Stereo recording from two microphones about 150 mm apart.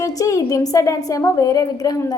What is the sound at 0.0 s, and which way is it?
A woman's voice, 20° left (ahead or behind).